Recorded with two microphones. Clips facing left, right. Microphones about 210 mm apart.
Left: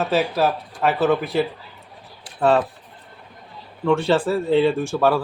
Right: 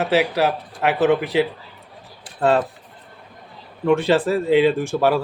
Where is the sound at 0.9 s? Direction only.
15° right (ahead or behind).